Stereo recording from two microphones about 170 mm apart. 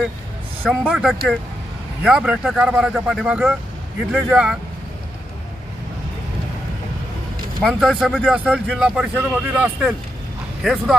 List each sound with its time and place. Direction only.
0.7 s speech: centre (ahead or behind)
7.7 s speech: 5° right (ahead or behind)